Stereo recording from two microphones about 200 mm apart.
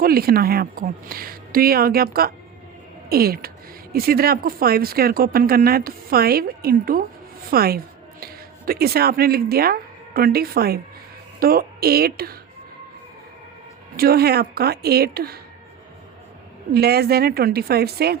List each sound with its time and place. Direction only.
0.0 s speech: 50° right (ahead or behind)
13.9 s speech: 50° right (ahead or behind)
16.7 s speech: 55° right (ahead or behind)